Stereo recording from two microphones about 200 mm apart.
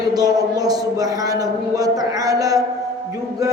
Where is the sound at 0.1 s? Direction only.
20° right (ahead or behind).